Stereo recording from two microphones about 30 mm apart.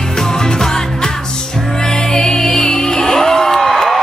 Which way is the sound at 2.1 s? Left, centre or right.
Centre.